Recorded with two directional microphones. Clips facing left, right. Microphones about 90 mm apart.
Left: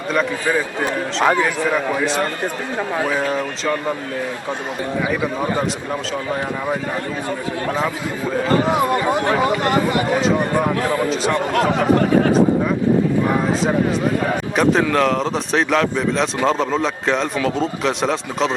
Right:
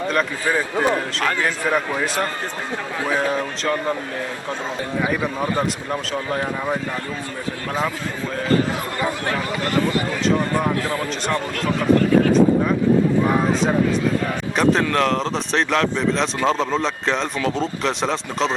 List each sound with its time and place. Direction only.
1.2 s a man's voice: 20° left (ahead or behind)
1.7 s speech: centre (ahead or behind)
5.9 s speech: centre (ahead or behind)
8.6 s speech: 20° left (ahead or behind)
11.3 s speech: 20° left (ahead or behind)
14.5 s speech: centre (ahead or behind)